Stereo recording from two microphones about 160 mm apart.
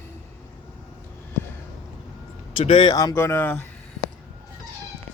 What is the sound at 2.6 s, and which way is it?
Speech, 35° left (ahead or behind).